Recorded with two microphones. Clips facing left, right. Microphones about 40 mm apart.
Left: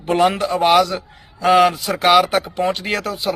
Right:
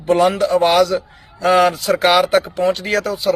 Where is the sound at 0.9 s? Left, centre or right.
Centre.